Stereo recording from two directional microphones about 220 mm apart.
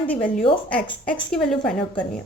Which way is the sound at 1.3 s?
5° left (ahead or behind).